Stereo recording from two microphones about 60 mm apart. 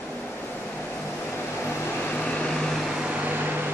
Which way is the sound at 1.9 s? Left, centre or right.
Left.